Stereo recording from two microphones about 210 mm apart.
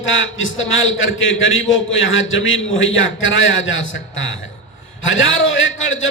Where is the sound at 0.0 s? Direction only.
65° left (ahead or behind).